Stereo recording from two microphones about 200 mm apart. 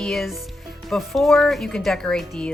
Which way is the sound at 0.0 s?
Centre (ahead or behind).